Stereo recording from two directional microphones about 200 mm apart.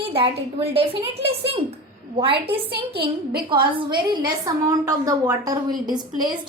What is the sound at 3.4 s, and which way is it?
A woman's voice, 25° right (ahead or behind).